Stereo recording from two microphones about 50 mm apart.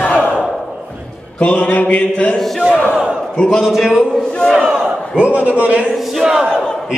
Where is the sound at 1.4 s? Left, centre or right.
Left.